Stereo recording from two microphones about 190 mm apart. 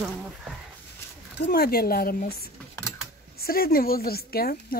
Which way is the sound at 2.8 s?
15° left (ahead or behind).